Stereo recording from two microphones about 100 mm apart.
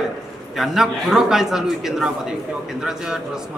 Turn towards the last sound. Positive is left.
turn(degrees=-5)  # may be behind; listen again after turning